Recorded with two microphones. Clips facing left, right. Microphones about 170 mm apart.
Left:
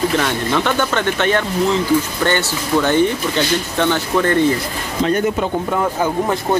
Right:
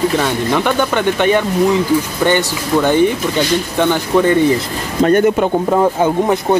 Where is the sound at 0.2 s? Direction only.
15° right (ahead or behind).